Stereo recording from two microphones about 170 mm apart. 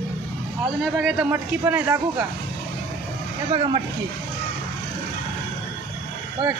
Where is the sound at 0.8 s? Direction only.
Centre (ahead or behind).